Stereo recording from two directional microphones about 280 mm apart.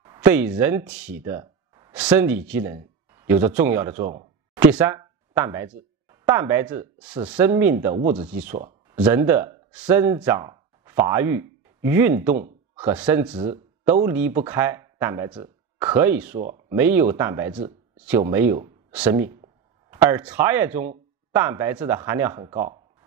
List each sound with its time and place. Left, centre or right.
0.0 s speech: centre
3.9 s speech: right
4.7 s speech: centre
13.3 s speech: centre
13.8 s speech: centre